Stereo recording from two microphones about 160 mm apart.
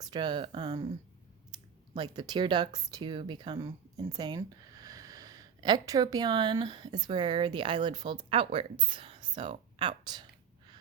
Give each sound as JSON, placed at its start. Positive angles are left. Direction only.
{"t": 0.0, "sound": "speech", "side_deg": -25}
{"t": 1.9, "sound": "speech", "side_deg": -25}